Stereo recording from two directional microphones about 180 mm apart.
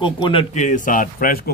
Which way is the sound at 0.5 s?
45° left (ahead or behind).